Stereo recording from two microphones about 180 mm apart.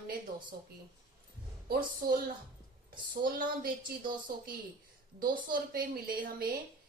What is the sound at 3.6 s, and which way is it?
A woman's voice, 55° right (ahead or behind).